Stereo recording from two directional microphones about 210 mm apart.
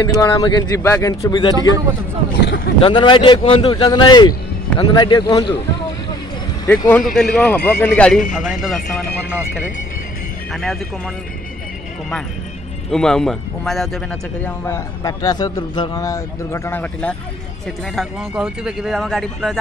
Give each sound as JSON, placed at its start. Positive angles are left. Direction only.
{"t": 0.2, "sound": "a man's voice", "side_deg": 20}
{"t": 2.4, "sound": "speech", "side_deg": 45}
{"t": 2.8, "sound": "speech", "side_deg": 25}
{"t": 6.6, "sound": "a man's voice", "side_deg": 10}
{"t": 10.5, "sound": "speech", "side_deg": 0}
{"t": 12.9, "sound": "speech", "side_deg": 5}
{"t": 14.4, "sound": "a man's voice", "side_deg": 15}
{"t": 17.9, "sound": "speech", "side_deg": -5}